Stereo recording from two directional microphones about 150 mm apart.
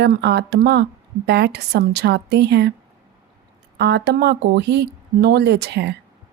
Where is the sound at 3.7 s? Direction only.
90° right.